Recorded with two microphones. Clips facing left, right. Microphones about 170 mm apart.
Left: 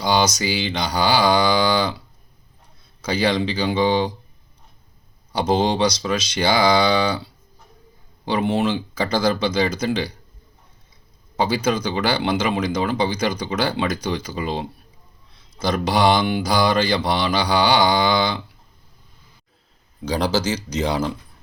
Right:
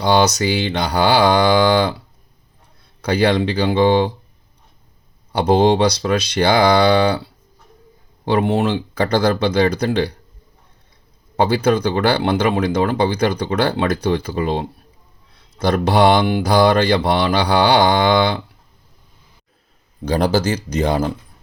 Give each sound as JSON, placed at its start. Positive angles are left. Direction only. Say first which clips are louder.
{"t": 0.0, "sound": "speech", "louder": "right 4 dB", "side_deg": -60}
{"t": 3.0, "sound": "speech", "louder": "right 4 dB", "side_deg": -60}
{"t": 5.3, "sound": "speech", "louder": "right 5 dB", "side_deg": -60}
{"t": 8.2, "sound": "speech", "louder": "right 3 dB", "side_deg": -55}
{"t": 11.3, "sound": "speech", "louder": "right 5 dB", "side_deg": -60}
{"t": 20.1, "sound": "speech", "louder": "right 4 dB", "side_deg": -55}